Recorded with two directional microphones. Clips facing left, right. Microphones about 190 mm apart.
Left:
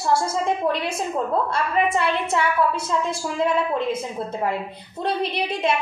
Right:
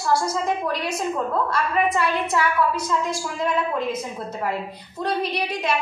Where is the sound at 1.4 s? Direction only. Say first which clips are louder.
Even; 25° left (ahead or behind).